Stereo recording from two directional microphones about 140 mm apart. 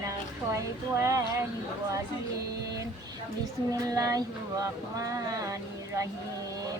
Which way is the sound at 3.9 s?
25° right (ahead or behind).